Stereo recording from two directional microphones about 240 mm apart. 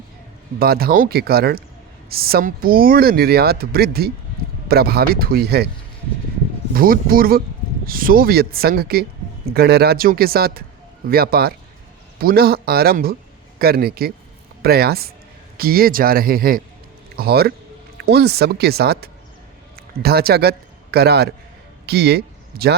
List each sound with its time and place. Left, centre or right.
0.6 s speech: right
6.7 s a man's voice: right